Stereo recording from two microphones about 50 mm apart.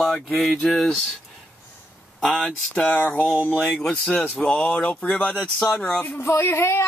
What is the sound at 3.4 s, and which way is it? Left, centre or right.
Speech, left.